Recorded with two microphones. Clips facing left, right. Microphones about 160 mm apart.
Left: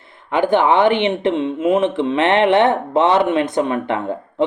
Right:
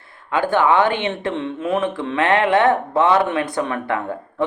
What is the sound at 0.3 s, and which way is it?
Speech, 20° left (ahead or behind).